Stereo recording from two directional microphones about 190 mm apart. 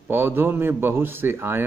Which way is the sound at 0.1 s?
10° right (ahead or behind).